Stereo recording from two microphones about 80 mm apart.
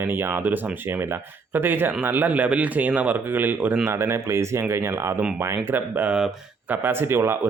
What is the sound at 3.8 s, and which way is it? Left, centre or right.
Speech, right.